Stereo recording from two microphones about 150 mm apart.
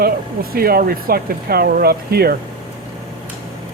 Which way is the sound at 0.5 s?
90° right.